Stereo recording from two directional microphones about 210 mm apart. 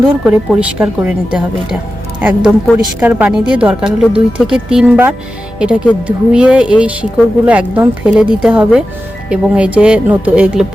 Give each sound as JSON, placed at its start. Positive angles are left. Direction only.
{"t": 0.0, "sound": "speech", "side_deg": -5}